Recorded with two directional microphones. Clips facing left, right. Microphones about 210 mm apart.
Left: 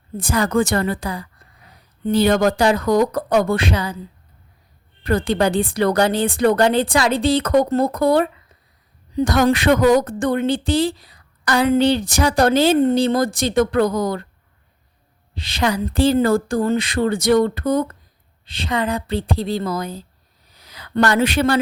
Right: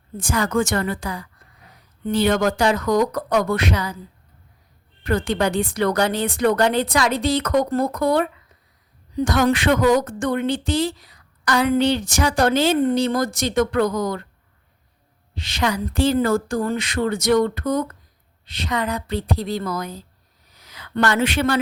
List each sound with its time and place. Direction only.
0.2 s a woman's voice: 35° left (ahead or behind)
5.0 s a woman's voice: 35° left (ahead or behind)
15.4 s a woman's voice: 35° left (ahead or behind)
20.5 s a sound: 30° left (ahead or behind)